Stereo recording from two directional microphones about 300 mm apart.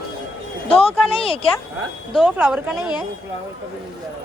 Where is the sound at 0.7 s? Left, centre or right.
Centre.